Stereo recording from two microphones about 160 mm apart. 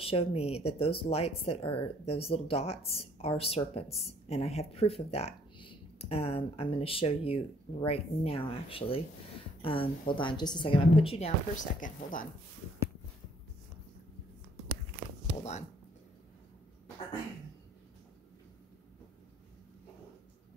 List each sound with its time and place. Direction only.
0.0 s speech: 35° left (ahead or behind); by 12.3 s 55° left (ahead or behind)